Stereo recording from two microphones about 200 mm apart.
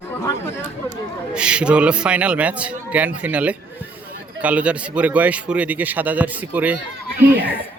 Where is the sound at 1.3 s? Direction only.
5° right (ahead or behind).